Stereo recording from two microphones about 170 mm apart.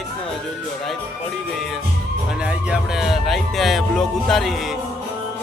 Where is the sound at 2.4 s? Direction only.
5° right (ahead or behind).